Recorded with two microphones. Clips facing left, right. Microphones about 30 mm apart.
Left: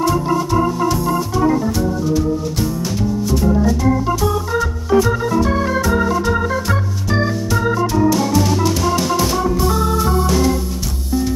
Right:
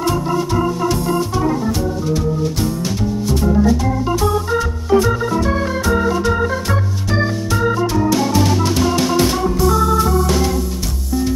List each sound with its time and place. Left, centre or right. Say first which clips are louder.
3.3 s organ: right 2 dB; centre
8.1 s music: even; centre
9.6 s organ: right 3 dB; centre